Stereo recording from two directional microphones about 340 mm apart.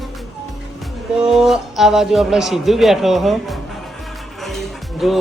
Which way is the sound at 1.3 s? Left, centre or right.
Centre.